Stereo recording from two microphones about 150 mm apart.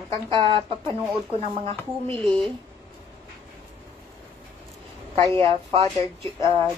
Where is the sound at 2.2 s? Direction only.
5° left (ahead or behind).